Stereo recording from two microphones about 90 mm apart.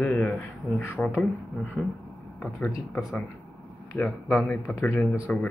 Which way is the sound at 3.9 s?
20° left (ahead or behind).